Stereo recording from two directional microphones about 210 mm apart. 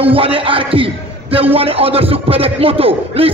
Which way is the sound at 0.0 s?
25° right (ahead or behind).